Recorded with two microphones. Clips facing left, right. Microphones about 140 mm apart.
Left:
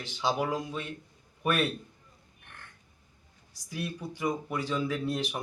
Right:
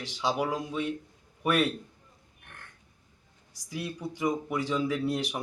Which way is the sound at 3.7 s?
15° right (ahead or behind).